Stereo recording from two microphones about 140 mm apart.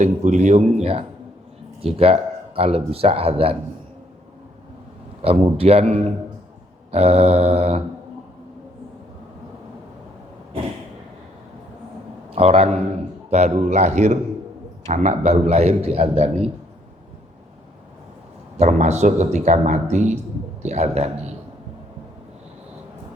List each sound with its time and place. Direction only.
0.0 s speech: 55° right (ahead or behind)
5.2 s speech: 45° right (ahead or behind)
12.3 s speech: 45° right (ahead or behind)
18.5 s a man's voice: 55° right (ahead or behind)